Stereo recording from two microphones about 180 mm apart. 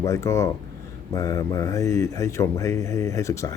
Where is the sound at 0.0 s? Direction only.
15° left (ahead or behind).